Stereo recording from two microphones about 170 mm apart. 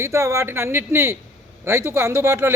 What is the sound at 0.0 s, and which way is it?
Speech, 15° right (ahead or behind).